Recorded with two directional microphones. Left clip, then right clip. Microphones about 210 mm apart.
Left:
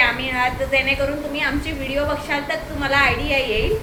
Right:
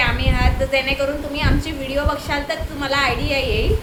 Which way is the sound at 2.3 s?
15° right (ahead or behind).